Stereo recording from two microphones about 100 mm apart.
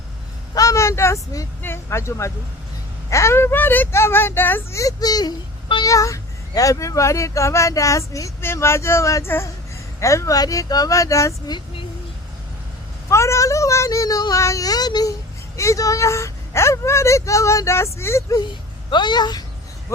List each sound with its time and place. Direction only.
0.5 s a sound: 35° left (ahead or behind)
1.6 s speech: 25° left (ahead or behind)
4.8 s a child's voice: 40° left (ahead or behind)
13.1 s a child's voice: 30° left (ahead or behind)
15.5 s speech: 30° left (ahead or behind)
18.9 s speech: 50° left (ahead or behind)